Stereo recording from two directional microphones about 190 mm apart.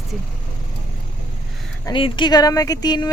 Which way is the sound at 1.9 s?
25° left (ahead or behind).